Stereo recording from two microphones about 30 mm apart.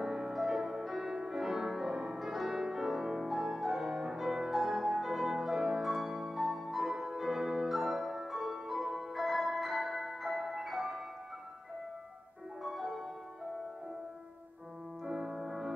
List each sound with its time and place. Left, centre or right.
0.0 s music: centre
12.6 s music: centre
15.0 s music: centre